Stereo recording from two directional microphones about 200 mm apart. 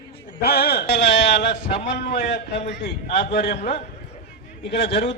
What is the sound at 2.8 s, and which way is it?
Speech, 55° left (ahead or behind).